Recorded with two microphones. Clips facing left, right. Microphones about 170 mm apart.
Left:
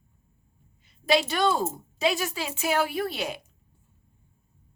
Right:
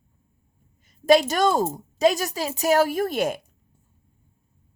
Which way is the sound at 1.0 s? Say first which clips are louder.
Right 6 dB; 45° right (ahead or behind).